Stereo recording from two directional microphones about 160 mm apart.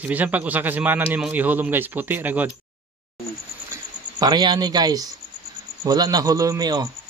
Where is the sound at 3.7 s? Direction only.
25° right (ahead or behind).